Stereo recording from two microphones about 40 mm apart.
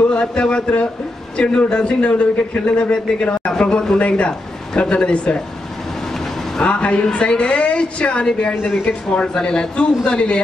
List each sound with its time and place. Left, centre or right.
0.1 s a man's voice: left
6.6 s a man's voice: left